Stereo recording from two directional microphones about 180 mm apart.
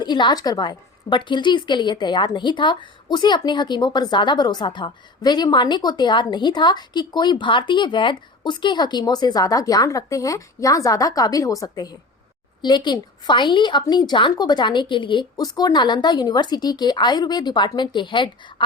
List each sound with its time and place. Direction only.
0.0 s a woman's voice: 25° left (ahead or behind)